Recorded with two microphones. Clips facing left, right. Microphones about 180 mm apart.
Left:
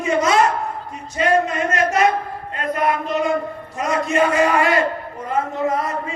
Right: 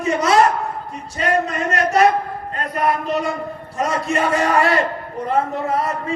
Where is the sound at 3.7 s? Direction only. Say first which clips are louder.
Left 2 dB; 35° right (ahead or behind).